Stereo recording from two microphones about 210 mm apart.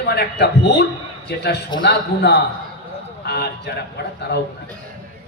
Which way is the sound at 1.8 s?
55° left (ahead or behind).